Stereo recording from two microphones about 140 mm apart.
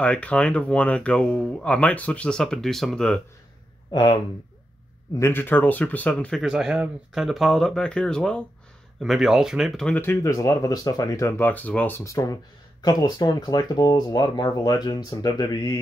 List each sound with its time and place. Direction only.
0.0 s speech: 10° left (ahead or behind)
3.9 s speech: 35° left (ahead or behind)
5.2 s speech: 15° left (ahead or behind)
6.4 s speech: 5° right (ahead or behind)
9.9 s speech: 20° left (ahead or behind)